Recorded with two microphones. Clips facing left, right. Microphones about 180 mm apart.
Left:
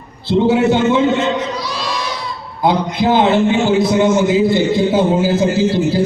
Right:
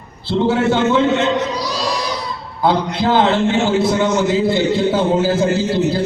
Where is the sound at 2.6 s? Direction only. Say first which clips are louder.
Left 1 dB; 15° left (ahead or behind).